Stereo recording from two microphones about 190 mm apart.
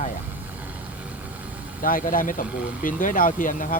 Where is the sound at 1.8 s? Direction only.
45° left (ahead or behind).